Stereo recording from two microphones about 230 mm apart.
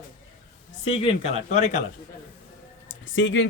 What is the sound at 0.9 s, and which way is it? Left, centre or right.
Speech, left.